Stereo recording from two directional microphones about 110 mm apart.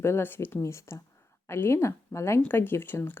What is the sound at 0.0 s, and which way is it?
Speech, 20° left (ahead or behind).